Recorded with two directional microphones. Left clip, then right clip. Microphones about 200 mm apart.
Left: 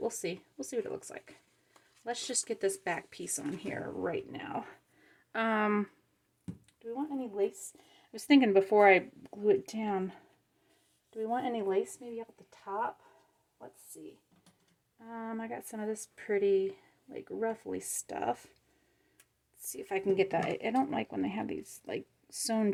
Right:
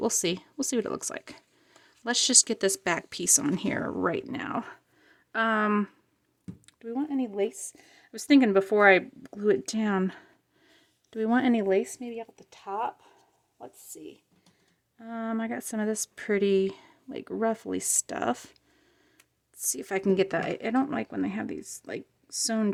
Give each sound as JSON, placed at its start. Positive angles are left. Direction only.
{"t": 0.0, "sound": "speech", "side_deg": -45}
{"t": 5.0, "sound": "speech", "side_deg": -15}
{"t": 6.7, "sound": "a sound", "side_deg": -45}
{"t": 7.9, "sound": "speech", "side_deg": -15}
{"t": 11.1, "sound": "speech", "side_deg": -50}
{"t": 14.9, "sound": "speech", "side_deg": -40}
{"t": 19.6, "sound": "speech", "side_deg": -40}
{"t": 20.2, "sound": "speech", "side_deg": -25}